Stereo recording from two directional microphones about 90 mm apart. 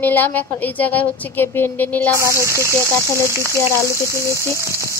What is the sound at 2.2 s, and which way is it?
Speech, 30° right (ahead or behind).